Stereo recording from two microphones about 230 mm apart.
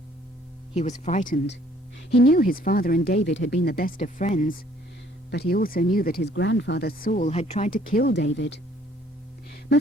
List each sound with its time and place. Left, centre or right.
0.7 s speech: left